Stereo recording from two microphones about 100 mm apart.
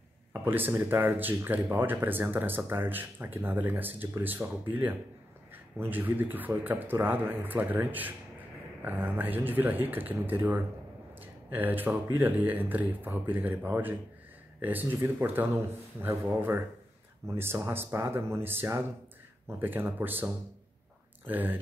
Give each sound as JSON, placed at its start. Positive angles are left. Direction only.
{"t": 0.3, "sound": "speech", "side_deg": -20}
{"t": 21.3, "sound": "speech", "side_deg": -20}